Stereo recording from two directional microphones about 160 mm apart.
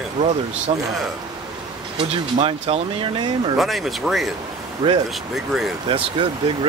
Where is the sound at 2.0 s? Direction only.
35° right (ahead or behind).